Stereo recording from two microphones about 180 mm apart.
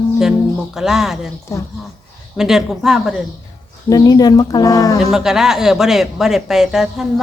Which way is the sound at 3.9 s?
20° left (ahead or behind).